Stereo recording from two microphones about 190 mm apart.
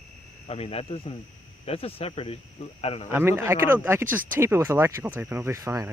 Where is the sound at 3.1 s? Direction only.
15° right (ahead or behind).